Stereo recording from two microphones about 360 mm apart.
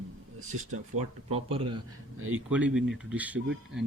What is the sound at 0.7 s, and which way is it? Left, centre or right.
Speech, centre.